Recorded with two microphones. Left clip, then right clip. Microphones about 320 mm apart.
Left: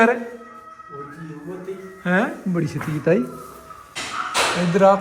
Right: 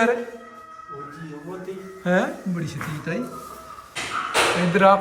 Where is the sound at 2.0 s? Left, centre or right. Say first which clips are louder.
Left 1 dB; centre.